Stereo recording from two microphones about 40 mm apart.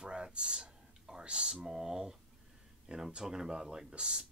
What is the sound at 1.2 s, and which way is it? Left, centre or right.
Speech, centre.